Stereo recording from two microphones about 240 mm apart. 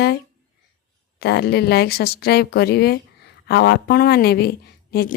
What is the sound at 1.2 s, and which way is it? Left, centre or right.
A woman's voice, left.